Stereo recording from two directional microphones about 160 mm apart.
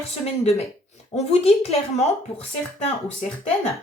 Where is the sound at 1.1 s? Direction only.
40° left (ahead or behind).